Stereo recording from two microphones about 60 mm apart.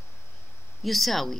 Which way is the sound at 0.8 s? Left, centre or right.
Centre.